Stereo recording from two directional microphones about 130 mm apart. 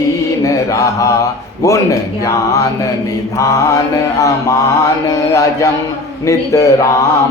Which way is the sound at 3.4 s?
25° left (ahead or behind).